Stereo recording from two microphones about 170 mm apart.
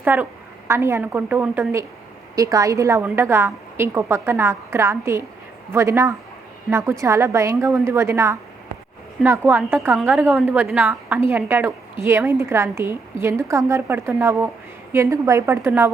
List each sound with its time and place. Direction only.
0.0 s a woman's voice: 10° right (ahead or behind)
10.0 s a woman's voice: centre (ahead or behind)
10.2 s a woman's voice: 10° right (ahead or behind)